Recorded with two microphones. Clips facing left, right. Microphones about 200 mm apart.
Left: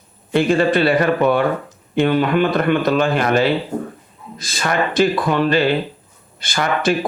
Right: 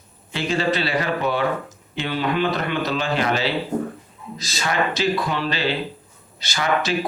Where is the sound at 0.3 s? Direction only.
55° left (ahead or behind).